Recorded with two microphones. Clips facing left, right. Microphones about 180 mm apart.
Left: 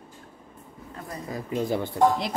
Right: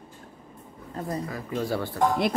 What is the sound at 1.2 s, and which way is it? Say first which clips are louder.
Speech: left 2 dB; 20° left (ahead or behind).